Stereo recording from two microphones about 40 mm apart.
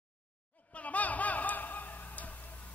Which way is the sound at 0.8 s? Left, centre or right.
Left.